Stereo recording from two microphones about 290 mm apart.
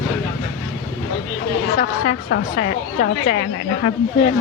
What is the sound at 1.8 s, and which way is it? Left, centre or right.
A woman's voice, left.